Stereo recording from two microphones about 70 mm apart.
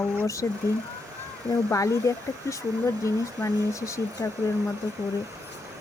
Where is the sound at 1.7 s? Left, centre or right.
Left.